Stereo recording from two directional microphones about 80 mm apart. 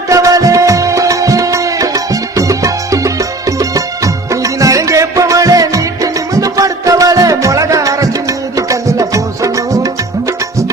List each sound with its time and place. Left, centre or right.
0.1 s music: right